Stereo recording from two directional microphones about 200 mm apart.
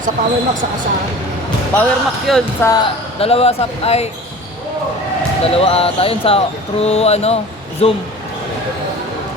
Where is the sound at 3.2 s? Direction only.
30° left (ahead or behind).